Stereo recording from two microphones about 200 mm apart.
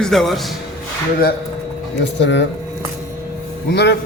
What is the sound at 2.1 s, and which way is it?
Speech, 65° left (ahead or behind).